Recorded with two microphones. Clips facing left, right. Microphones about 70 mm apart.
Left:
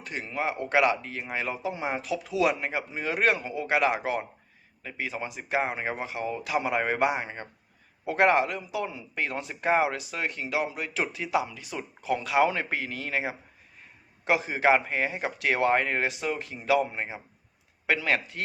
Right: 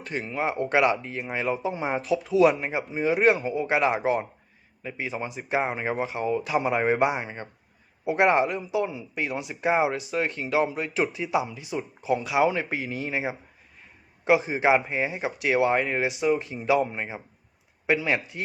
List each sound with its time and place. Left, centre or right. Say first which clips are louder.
0.0 s speech: right 3 dB; right
9.1 s speech: left 1 dB; centre